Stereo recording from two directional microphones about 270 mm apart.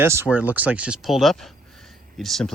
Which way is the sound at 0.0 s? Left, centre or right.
Centre.